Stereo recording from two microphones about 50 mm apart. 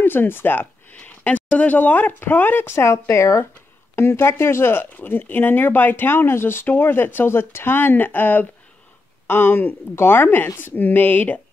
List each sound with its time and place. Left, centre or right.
0.0 s speech: left
0.9 s speech: left
2.7 s speech: left
3.9 s speech: left
4.9 s speech: left